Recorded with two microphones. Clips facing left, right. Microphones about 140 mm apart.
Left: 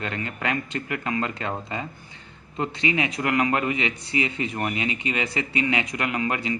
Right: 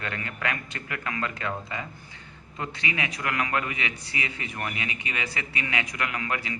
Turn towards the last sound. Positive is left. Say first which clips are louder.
# left 5 dB
turn(degrees=25)  # may be behind; listen again after turning